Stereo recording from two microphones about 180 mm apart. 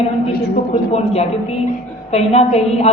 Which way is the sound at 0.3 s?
60° left (ahead or behind).